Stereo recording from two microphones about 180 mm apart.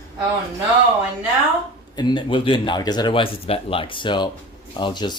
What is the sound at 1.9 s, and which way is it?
Speech, 25° left (ahead or behind).